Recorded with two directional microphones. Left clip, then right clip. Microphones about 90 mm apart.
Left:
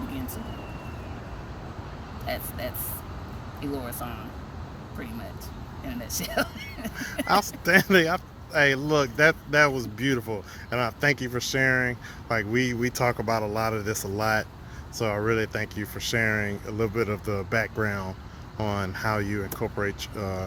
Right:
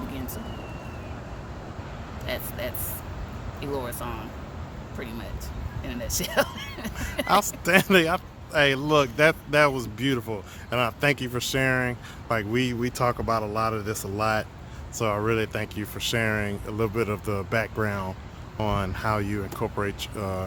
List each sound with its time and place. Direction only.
2.2 s speech: 30° right (ahead or behind)
5.8 s speech: 35° right (ahead or behind)
7.3 s speech: centre (ahead or behind)
12.8 s speech: 20° left (ahead or behind)
14.9 s speech: centre (ahead or behind)